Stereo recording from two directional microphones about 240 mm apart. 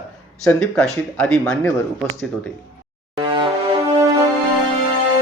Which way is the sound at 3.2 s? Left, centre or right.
Right.